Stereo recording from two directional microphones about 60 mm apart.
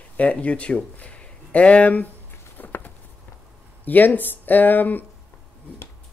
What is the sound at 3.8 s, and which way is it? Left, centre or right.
Speech, left.